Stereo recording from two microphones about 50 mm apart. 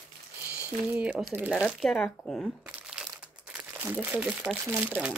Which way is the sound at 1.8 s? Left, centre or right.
Centre.